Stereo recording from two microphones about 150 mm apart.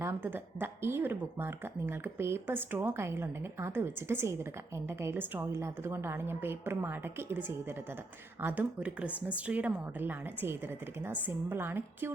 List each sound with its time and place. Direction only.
0.0 s speech: 15° right (ahead or behind)